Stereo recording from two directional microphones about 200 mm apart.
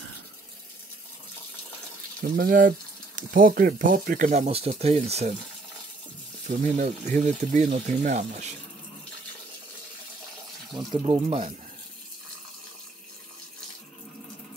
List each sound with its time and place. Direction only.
2.3 s speech: 45° right (ahead or behind)
6.4 s speech: 35° right (ahead or behind)
10.9 s speech: 25° right (ahead or behind)